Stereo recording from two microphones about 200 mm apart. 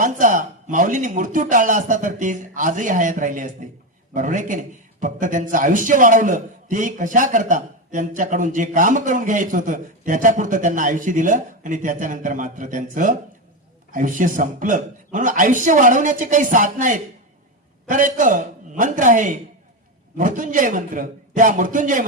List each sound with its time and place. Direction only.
0.0 s a man's voice: 40° right (ahead or behind)